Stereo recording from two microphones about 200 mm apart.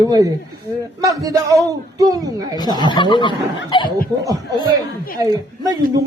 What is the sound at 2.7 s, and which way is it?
Speech, 25° left (ahead or behind).